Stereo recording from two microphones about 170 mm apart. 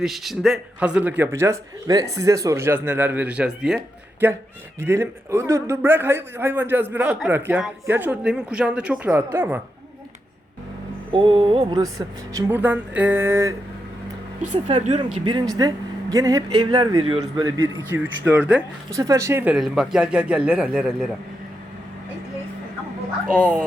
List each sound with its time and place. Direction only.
0.0 s speech: centre (ahead or behind)
11.1 s speech: 30° right (ahead or behind); by 13.5 s 15° right (ahead or behind)
14.8 s speech: 35° right (ahead or behind); by 18.6 s 10° right (ahead or behind)
18.9 s speech: 20° right (ahead or behind)
19.5 s speech: centre (ahead or behind)